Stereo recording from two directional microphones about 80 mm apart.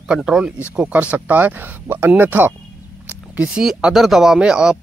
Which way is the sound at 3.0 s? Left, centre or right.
Centre.